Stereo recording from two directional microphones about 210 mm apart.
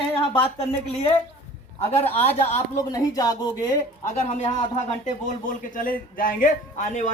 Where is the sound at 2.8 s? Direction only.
15° left (ahead or behind).